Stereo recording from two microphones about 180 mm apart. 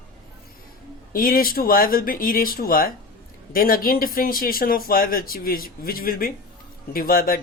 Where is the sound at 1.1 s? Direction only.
55° left (ahead or behind).